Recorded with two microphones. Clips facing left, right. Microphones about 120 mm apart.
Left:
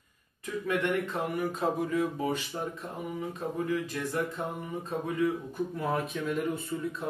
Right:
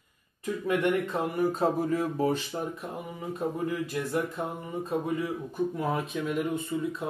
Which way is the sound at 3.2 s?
15° right (ahead or behind).